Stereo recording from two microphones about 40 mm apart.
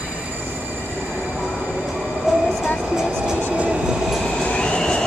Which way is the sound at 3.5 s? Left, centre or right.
Right.